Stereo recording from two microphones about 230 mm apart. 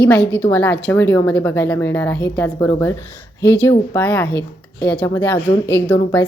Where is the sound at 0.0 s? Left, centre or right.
Centre.